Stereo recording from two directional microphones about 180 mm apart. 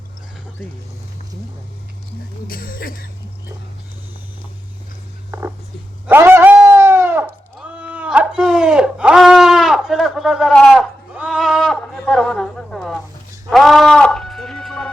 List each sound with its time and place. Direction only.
2.5 s speech: 55° left (ahead or behind)
5.3 s a sound: 15° right (ahead or behind)
6.1 s bleat: 10° right (ahead or behind)
13.5 s music: centre (ahead or behind)